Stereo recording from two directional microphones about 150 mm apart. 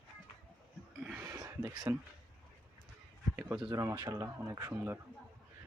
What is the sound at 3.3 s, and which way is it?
Speech, 10° right (ahead or behind).